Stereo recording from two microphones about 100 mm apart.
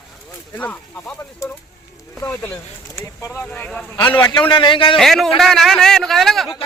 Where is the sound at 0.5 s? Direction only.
15° left (ahead or behind).